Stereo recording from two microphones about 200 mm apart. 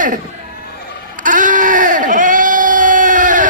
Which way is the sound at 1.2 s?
40° right (ahead or behind).